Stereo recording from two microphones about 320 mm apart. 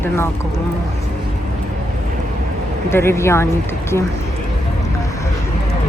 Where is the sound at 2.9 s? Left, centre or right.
Centre.